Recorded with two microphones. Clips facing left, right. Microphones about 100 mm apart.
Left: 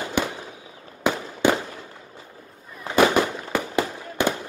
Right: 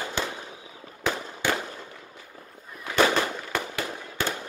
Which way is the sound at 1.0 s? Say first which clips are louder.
Left 7 dB; 15° left (ahead or behind).